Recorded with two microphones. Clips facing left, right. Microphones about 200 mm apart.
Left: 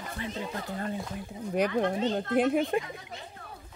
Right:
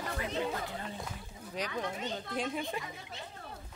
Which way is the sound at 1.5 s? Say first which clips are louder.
Left 10 dB; 60° left (ahead or behind).